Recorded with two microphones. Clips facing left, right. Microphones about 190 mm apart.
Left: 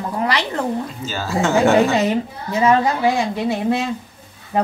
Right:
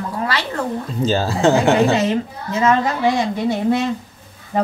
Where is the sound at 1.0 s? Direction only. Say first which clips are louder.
Right 4 dB; 35° right (ahead or behind).